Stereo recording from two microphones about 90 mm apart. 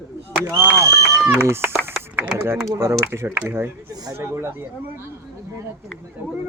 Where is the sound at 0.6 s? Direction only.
25° right (ahead or behind).